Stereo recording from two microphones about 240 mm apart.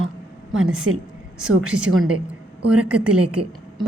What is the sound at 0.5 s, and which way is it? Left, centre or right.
Speech, right.